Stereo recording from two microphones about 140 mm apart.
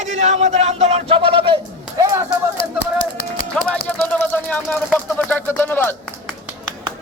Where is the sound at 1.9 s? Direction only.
25° right (ahead or behind).